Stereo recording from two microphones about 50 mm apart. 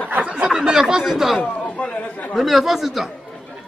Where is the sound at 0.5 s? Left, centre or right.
Centre.